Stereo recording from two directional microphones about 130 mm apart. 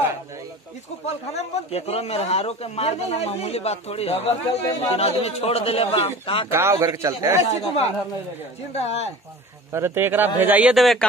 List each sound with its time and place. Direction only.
1.0 s speech: 55° left (ahead or behind)
6.5 s a man's voice: 20° right (ahead or behind)
7.3 s speech: 55° left (ahead or behind)
9.7 s a man's voice: 20° right (ahead or behind); by 11.1 s centre (ahead or behind)